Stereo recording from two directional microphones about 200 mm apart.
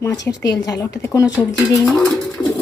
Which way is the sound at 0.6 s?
20° left (ahead or behind).